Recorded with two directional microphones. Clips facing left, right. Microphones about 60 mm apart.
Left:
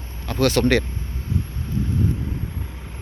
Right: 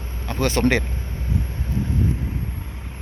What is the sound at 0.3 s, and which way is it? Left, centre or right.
Speech, centre.